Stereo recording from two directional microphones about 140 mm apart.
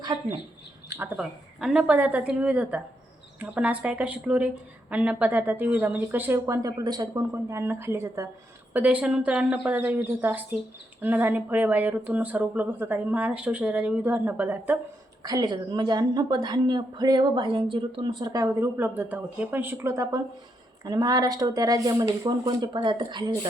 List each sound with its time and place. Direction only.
0.0 s a sound: 30° right (ahead or behind)
0.9 s a woman's voice: 15° right (ahead or behind)
7.3 s a woman's voice: 15° right (ahead or behind)
8.7 s a woman's voice: 10° right (ahead or behind)
15.2 s a woman's voice: 25° right (ahead or behind)